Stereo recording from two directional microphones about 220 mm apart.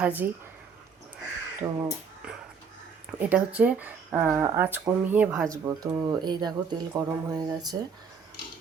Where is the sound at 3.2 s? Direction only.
5° right (ahead or behind).